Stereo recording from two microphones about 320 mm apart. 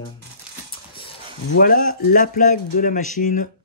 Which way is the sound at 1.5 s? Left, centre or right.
Left.